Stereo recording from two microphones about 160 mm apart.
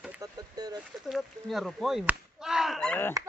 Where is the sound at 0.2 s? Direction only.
25° right (ahead or behind).